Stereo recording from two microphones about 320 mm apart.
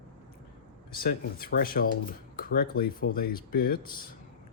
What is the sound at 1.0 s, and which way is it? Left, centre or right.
Speech, left.